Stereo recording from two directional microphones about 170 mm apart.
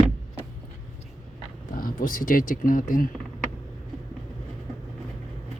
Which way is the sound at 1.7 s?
55° left (ahead or behind).